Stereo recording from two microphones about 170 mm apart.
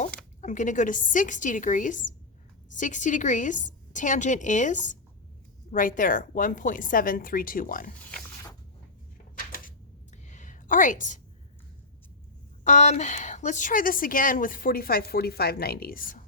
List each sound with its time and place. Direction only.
0.4 s a woman's voice: 45° left (ahead or behind)
9.5 s a sound: 50° left (ahead or behind)
12.6 s a woman's voice: 45° left (ahead or behind)